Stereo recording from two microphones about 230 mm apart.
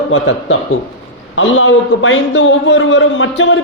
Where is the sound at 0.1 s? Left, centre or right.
Left.